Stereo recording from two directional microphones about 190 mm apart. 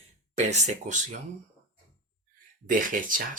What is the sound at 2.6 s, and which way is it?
Speech, 45° right (ahead or behind).